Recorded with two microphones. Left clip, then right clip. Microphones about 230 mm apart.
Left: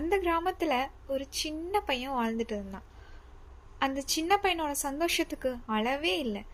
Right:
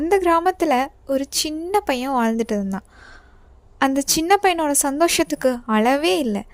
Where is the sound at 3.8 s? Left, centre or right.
Right.